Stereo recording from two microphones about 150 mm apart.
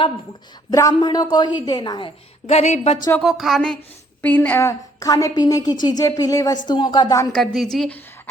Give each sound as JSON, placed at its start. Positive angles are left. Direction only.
{"t": 0.7, "sound": "a woman's voice", "side_deg": 20}
{"t": 2.6, "sound": "a woman's voice", "side_deg": 50}
{"t": 3.2, "sound": "a woman's voice", "side_deg": 0}
{"t": 7.3, "sound": "a woman's voice", "side_deg": 0}